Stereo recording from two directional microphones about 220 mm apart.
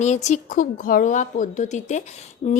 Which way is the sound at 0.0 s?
30° left (ahead or behind).